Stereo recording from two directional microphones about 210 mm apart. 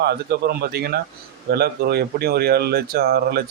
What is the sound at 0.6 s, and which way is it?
Speech, 50° right (ahead or behind).